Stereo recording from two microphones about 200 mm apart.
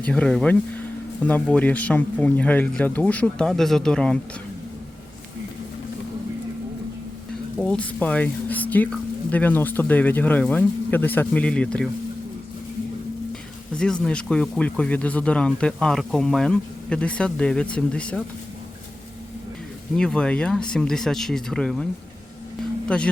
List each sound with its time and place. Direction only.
0.0 s speech: 5° left (ahead or behind)
7.6 s speech: 5° left (ahead or behind)
13.7 s speech: 5° left (ahead or behind)
20.0 s speech: 5° left (ahead or behind)
22.9 s speech: 5° left (ahead or behind)